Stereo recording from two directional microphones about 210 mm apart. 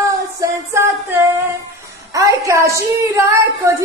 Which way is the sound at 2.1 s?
15° right (ahead or behind).